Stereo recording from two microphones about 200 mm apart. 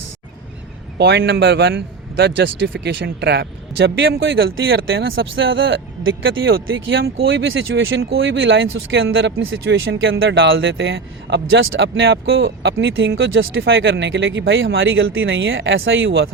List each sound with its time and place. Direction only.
0.9 s a man's voice: 60° right (ahead or behind)
7.0 s speech: 60° right (ahead or behind)